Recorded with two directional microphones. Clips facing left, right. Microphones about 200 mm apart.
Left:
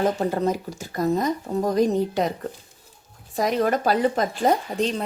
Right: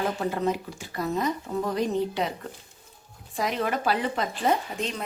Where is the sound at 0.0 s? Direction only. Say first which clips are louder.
Left 4 dB; 40° left (ahead or behind).